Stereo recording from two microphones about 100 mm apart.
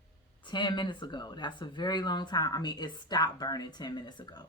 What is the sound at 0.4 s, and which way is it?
Speech, 50° left (ahead or behind).